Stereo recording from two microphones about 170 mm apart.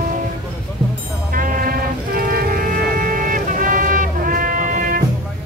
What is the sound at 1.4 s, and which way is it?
Music, 55° right (ahead or behind).